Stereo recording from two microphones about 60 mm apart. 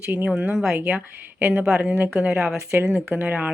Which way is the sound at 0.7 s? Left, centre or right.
Right.